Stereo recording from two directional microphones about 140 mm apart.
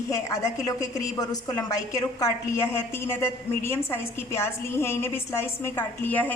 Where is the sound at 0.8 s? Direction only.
25° left (ahead or behind).